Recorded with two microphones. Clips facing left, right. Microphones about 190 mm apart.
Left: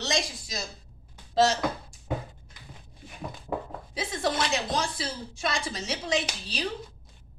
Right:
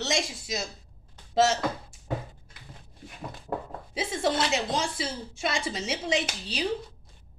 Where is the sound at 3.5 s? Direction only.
Centre (ahead or behind).